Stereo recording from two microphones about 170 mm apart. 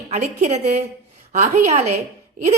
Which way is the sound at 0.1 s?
40° right (ahead or behind).